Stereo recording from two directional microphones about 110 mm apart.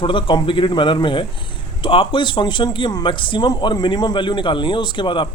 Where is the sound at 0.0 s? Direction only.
50° left (ahead or behind).